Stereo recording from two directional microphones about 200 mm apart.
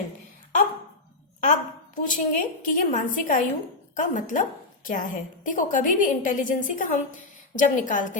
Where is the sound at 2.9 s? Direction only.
40° left (ahead or behind).